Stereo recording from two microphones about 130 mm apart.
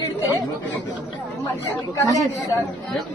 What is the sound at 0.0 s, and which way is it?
Chatter, 25° left (ahead or behind).